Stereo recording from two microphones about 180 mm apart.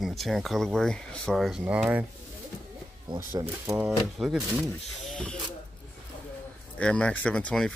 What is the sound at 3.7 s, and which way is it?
Speech, 5° right (ahead or behind).